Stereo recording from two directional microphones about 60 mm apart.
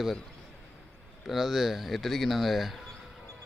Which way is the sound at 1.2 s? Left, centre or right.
Centre.